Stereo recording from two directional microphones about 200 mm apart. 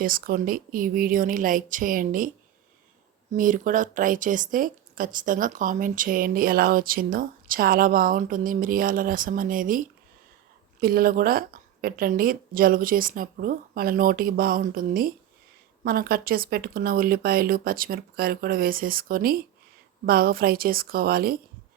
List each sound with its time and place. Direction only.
0.0 s speech: 45° right (ahead or behind)
3.3 s speech: 40° right (ahead or behind)